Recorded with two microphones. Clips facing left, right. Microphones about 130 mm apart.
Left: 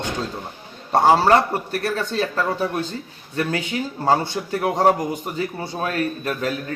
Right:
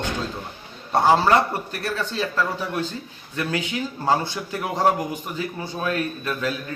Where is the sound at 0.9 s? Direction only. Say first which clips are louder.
Left 2 dB; 40° left (ahead or behind).